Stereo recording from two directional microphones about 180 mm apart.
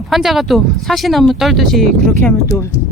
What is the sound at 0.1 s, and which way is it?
Speech, centre (ahead or behind).